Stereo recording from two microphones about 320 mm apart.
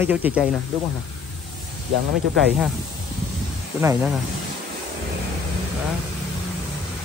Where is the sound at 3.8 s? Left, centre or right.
Centre.